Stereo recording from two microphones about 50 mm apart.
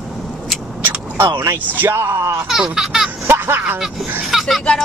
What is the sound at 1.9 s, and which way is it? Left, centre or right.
Speech, right.